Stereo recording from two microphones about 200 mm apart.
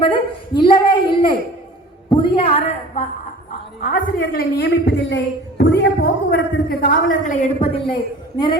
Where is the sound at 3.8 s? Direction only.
45° left (ahead or behind); by 7.9 s 30° left (ahead or behind).